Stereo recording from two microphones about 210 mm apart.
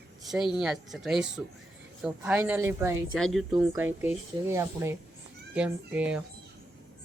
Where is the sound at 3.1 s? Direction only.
Centre (ahead or behind).